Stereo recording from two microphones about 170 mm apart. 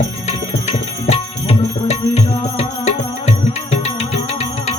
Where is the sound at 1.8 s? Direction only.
40° left (ahead or behind).